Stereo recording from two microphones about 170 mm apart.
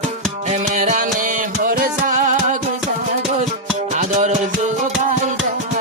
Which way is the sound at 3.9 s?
45° right (ahead or behind).